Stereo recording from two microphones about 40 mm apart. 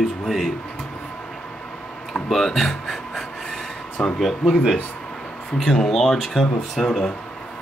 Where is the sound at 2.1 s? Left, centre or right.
Centre.